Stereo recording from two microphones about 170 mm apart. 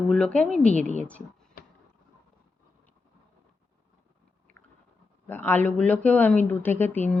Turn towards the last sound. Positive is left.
turn(degrees=10)  # may be behind; listen again after turning